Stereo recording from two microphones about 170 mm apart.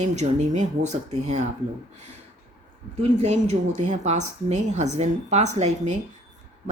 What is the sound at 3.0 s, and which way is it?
A woman's voice, 40° right (ahead or behind).